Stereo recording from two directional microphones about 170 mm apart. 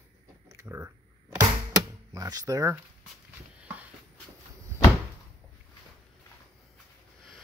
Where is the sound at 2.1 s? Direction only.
20° right (ahead or behind).